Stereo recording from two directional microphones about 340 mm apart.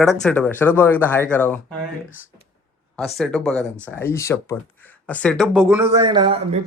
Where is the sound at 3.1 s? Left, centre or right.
Centre.